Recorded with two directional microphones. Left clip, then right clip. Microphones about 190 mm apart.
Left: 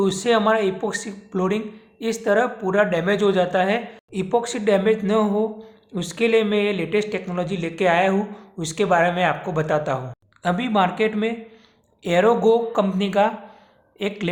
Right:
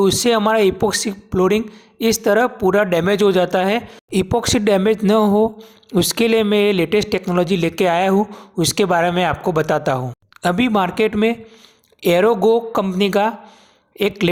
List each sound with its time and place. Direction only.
0.0 s speech: 45° right (ahead or behind)